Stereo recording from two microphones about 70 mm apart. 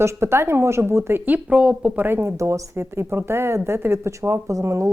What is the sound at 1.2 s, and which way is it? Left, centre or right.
Speech, right.